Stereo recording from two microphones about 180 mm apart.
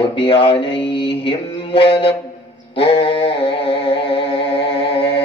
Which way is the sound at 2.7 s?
30° left (ahead or behind).